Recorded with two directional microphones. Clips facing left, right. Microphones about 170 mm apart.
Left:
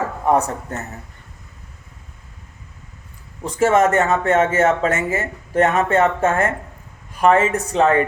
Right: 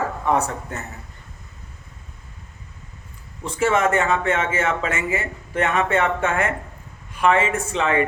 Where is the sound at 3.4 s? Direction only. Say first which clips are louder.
Left 4 dB; 40° left (ahead or behind).